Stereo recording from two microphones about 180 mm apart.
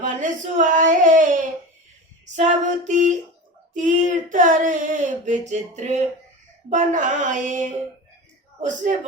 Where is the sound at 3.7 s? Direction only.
45° right (ahead or behind).